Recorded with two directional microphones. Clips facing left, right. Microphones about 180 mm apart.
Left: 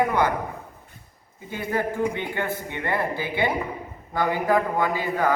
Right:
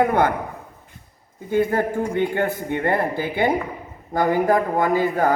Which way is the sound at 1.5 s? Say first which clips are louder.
Right 7 dB; 50° right (ahead or behind).